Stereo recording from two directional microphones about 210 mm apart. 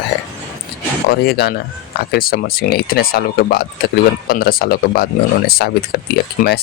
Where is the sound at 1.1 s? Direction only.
50° left (ahead or behind).